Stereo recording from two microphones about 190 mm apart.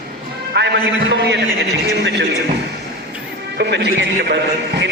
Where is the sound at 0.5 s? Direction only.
65° right (ahead or behind).